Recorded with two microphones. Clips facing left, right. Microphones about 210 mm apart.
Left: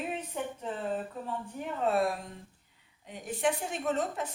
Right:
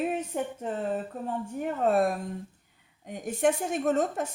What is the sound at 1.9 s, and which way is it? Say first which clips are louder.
A woman's voice: right 4 dB; 45° right (ahead or behind).